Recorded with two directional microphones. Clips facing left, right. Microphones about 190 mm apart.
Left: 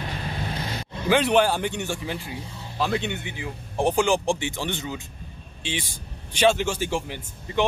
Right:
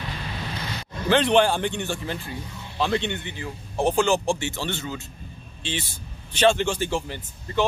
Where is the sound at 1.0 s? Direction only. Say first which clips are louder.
Right 1 dB; 10° left (ahead or behind).